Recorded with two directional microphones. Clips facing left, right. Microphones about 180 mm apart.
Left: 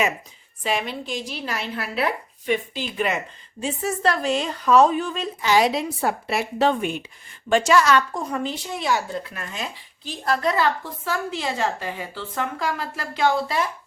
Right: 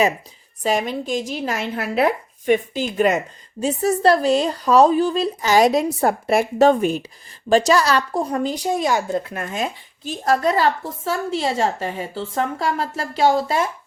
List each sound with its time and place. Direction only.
0.6 s speech: 40° right (ahead or behind)
13.2 s speech: 40° right (ahead or behind)